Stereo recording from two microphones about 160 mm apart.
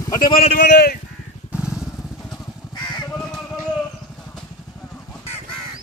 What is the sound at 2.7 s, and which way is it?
Crow, 25° left (ahead or behind).